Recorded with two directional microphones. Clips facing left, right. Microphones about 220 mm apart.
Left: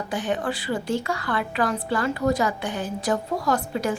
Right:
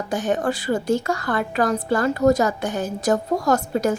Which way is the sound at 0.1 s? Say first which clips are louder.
Right 5 dB; 45° right (ahead or behind).